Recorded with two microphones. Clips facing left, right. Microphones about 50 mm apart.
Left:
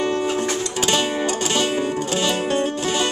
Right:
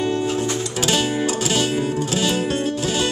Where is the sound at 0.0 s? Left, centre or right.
Left.